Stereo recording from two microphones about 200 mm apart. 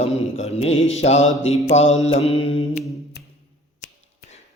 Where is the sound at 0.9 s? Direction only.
35° left (ahead or behind).